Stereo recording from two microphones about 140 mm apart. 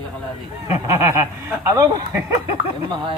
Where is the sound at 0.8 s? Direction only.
20° right (ahead or behind).